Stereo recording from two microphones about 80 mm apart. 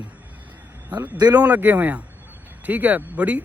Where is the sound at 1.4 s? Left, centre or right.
Right.